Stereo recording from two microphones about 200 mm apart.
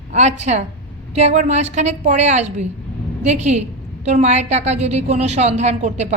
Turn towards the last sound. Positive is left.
turn(degrees=-35)  # may be behind; listen again after turning